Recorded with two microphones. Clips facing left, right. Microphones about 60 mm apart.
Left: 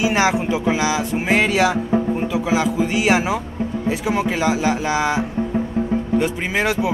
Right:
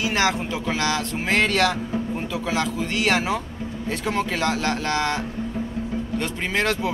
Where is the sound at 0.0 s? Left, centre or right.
Centre.